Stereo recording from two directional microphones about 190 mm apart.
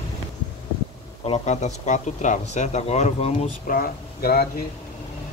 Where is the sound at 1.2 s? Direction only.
35° left (ahead or behind).